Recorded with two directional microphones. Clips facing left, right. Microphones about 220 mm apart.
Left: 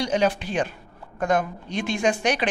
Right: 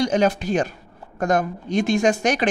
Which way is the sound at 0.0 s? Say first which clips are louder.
Right 3 dB; 45° right (ahead or behind).